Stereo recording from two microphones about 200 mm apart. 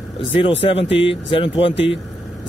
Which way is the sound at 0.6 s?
30° left (ahead or behind).